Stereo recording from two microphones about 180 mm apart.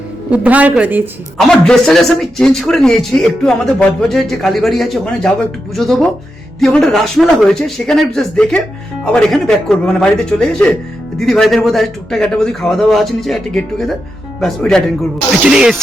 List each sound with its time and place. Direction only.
0.3 s a woman's voice: 10° right (ahead or behind)
1.4 s a man's voice: centre (ahead or behind)